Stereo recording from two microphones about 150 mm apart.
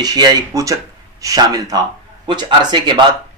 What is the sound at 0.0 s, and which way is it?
Speech, 25° right (ahead or behind).